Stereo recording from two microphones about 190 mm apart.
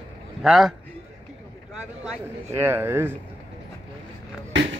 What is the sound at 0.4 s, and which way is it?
Speech, centre (ahead or behind).